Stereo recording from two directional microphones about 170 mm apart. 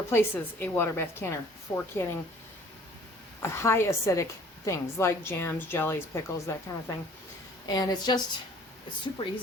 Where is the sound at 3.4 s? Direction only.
15° left (ahead or behind).